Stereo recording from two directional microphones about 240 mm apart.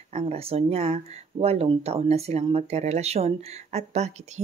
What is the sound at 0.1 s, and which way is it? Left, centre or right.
Speech, right.